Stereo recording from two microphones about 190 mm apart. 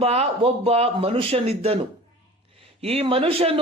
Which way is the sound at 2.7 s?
30° right (ahead or behind).